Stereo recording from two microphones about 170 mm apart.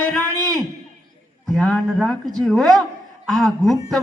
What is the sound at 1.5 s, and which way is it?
A man's voice, 5° left (ahead or behind).